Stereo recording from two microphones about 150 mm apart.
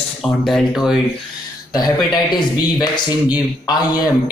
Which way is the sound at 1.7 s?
25° left (ahead or behind).